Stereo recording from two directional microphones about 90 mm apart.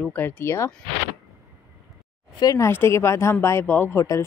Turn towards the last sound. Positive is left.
turn(degrees=35)  # may be behind; listen again after turning